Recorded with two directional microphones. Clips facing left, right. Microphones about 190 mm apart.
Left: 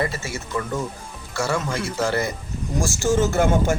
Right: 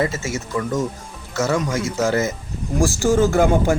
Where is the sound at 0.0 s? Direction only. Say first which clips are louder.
Right 4 dB; 20° right (ahead or behind).